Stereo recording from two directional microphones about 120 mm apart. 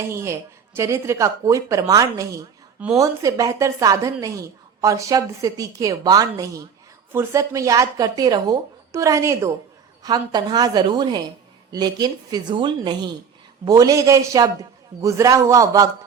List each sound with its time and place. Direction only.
0.0 s a woman's voice: 20° right (ahead or behind)
10.0 s a woman's voice: 35° right (ahead or behind)